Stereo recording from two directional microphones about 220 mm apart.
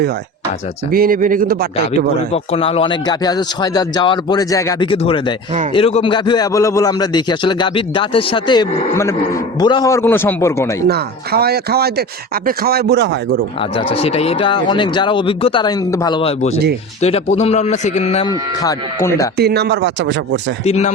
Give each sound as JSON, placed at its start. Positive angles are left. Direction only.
{"t": 0.9, "sound": "speech", "side_deg": -40}
{"t": 2.3, "sound": "a man's voice", "side_deg": 25}
{"t": 10.8, "sound": "speech", "side_deg": -45}
{"t": 13.6, "sound": "a man's voice", "side_deg": 25}
{"t": 18.3, "sound": "a man's voice", "side_deg": 15}
{"t": 19.4, "sound": "speech", "side_deg": -50}
{"t": 20.7, "sound": "speech", "side_deg": 30}